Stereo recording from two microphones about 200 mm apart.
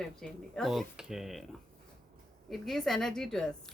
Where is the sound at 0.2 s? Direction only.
Centre (ahead or behind).